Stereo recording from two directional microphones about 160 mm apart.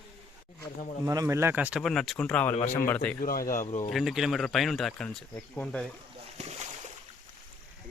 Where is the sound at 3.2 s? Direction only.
60° left (ahead or behind).